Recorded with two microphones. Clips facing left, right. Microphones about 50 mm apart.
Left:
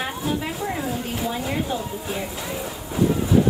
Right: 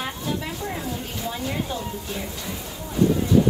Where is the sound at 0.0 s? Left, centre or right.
Centre.